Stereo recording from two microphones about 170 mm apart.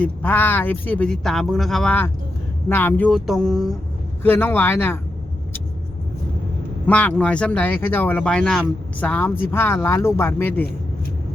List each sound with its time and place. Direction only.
0.0 s speech: 10° left (ahead or behind)
4.2 s speech: 10° left (ahead or behind)
6.8 s speech: 10° left (ahead or behind)